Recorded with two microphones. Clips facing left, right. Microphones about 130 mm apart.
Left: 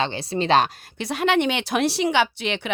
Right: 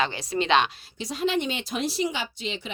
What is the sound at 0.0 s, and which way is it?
Speech, 30° left (ahead or behind).